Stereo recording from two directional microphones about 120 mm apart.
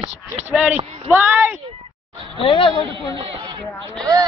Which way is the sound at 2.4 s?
45° left (ahead or behind).